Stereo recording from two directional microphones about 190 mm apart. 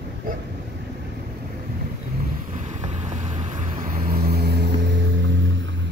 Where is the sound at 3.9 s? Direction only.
50° right (ahead or behind).